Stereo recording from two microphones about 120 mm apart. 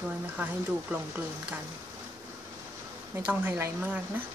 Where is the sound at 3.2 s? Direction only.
20° right (ahead or behind).